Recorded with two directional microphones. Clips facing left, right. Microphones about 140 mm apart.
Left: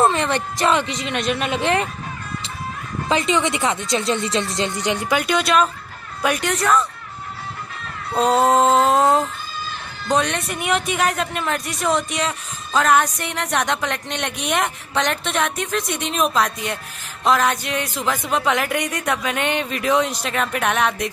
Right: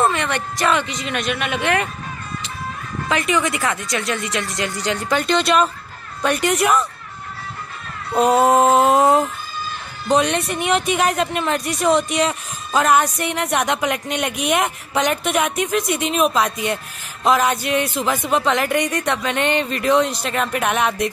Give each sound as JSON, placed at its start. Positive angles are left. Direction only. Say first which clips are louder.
{"t": 0.0, "sound": "speech", "louder": "left 1 dB", "side_deg": 30}
{"t": 3.1, "sound": "speech", "louder": "left 1 dB", "side_deg": 25}
{"t": 5.1, "sound": "a woman's voice", "louder": "right 2 dB", "side_deg": 5}
{"t": 8.1, "sound": "music", "louder": "right 2 dB", "side_deg": -5}
{"t": 10.0, "sound": "a woman's voice", "louder": "right 3 dB", "side_deg": -5}